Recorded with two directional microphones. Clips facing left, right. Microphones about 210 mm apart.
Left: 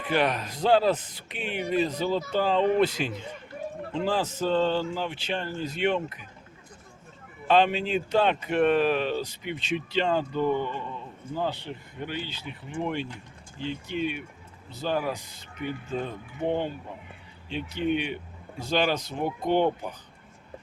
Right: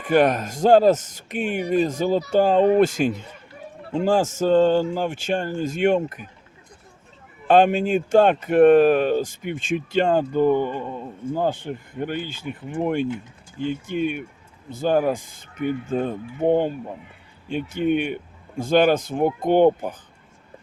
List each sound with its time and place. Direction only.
0.0 s speech: 45° right (ahead or behind)
7.4 s speech: 50° right (ahead or behind)